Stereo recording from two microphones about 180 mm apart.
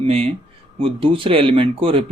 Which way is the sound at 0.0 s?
35° right (ahead or behind).